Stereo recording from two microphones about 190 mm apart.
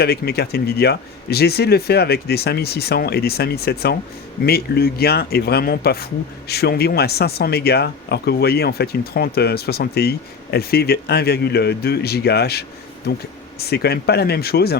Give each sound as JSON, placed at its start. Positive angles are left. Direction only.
{"t": 0.0, "sound": "speech", "side_deg": 55}